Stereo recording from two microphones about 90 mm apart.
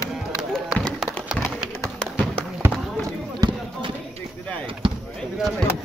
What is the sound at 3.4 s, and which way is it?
Basketball bounce, 45° right (ahead or behind).